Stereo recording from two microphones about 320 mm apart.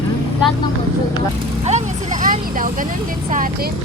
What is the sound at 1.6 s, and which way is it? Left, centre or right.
Vehicle, right.